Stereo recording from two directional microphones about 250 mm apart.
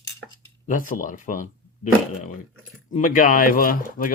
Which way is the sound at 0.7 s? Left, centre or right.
Left.